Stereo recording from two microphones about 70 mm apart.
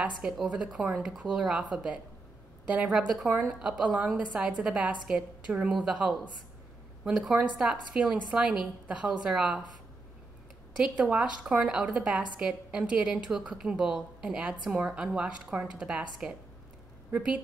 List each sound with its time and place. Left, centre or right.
0.2 s a woman's voice: centre
3.4 s a woman's voice: centre
10.8 s a woman's voice: centre